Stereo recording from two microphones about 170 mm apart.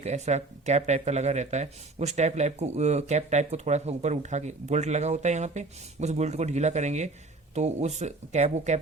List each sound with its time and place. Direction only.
0.0 s speech: 40° right (ahead or behind)